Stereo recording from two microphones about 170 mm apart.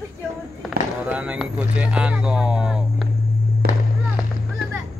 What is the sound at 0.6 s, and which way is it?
Speech, 5° right (ahead or behind).